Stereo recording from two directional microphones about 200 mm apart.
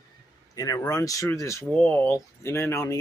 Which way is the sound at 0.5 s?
20° left (ahead or behind).